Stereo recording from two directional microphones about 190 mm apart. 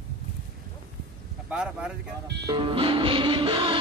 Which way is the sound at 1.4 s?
5° right (ahead or behind).